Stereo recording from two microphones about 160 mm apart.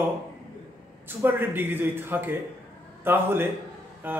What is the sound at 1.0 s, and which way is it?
A man's voice, 15° right (ahead or behind).